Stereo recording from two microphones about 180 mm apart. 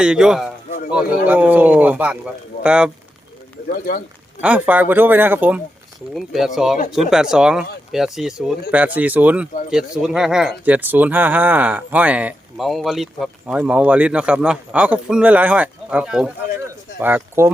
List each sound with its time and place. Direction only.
0.0 s speech: 5° right (ahead or behind)
3.7 s speech: 50° left (ahead or behind)
4.4 s speech: 10° right (ahead or behind)